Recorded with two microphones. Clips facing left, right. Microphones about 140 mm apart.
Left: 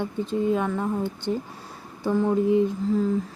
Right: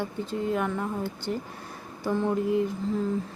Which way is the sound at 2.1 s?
10° left (ahead or behind).